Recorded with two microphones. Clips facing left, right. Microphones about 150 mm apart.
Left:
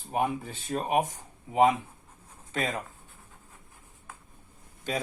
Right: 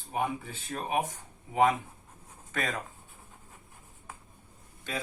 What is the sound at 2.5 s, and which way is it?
Speech, 25° left (ahead or behind).